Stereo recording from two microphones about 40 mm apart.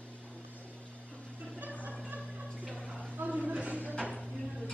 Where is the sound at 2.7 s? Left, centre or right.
Centre.